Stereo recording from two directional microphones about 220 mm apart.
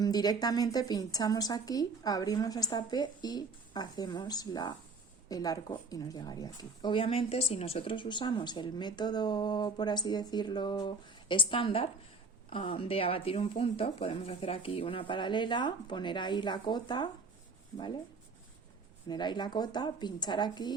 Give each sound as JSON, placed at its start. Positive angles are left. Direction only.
{"t": 0.0, "sound": "a woman's voice", "side_deg": 20}
{"t": 19.0, "sound": "speech", "side_deg": 20}